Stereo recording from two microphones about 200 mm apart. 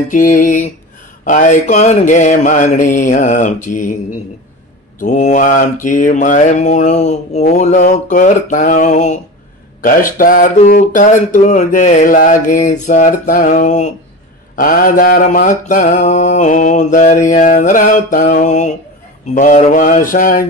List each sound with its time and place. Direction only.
0.1 s speech: 40° left (ahead or behind)
5.0 s speech: 40° left (ahead or behind)
19.3 s mantra: 40° left (ahead or behind)